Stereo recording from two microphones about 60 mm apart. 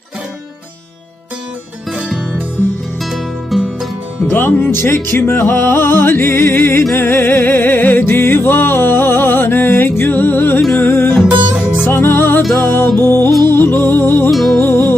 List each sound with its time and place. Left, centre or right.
2.0 s music: centre
3.0 s music: centre
4.3 s music: left
14.3 s music: centre
14.6 s music: left